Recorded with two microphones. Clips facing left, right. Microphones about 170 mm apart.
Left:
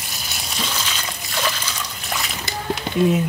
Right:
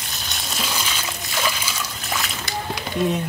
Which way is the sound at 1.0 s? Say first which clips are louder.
Even; 5° right (ahead or behind).